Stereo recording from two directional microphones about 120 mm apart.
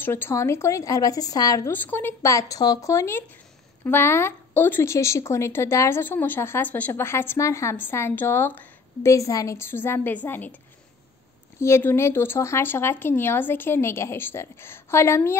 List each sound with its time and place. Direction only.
0.0 s speech: 20° left (ahead or behind)
1.7 s speech: 15° left (ahead or behind)
9.1 s speech: 30° left (ahead or behind)
11.6 s speech: 20° left (ahead or behind)